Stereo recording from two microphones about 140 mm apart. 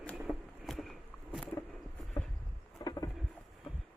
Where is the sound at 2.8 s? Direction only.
25° left (ahead or behind).